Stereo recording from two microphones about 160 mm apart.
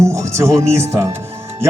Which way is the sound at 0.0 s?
20° right (ahead or behind).